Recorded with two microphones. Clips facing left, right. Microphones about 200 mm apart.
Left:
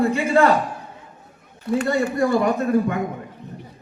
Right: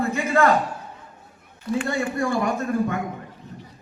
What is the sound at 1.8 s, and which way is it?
Speech, 40° left (ahead or behind).